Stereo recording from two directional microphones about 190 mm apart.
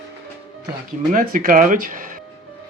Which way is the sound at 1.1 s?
50° right (ahead or behind).